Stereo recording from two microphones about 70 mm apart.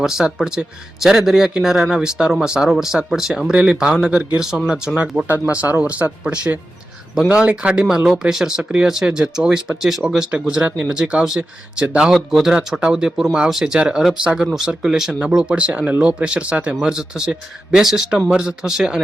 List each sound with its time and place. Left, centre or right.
0.0 s speech: centre
5.5 s speech: right